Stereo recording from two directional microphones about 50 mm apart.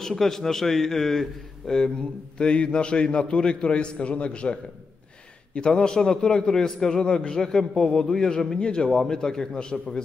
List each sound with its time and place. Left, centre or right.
0.0 s a man's voice: centre
2.3 s a man's voice: left